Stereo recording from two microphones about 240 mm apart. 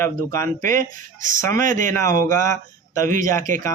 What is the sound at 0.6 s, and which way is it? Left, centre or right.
Speech, right.